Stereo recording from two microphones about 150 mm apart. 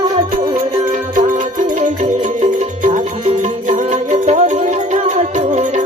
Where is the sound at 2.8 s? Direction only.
50° right (ahead or behind).